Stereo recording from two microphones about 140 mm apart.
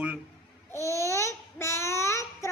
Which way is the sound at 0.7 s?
20° left (ahead or behind).